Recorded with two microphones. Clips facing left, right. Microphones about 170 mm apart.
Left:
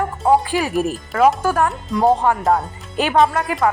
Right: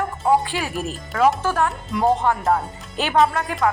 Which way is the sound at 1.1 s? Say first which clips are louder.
Left 2 dB; 10° left (ahead or behind).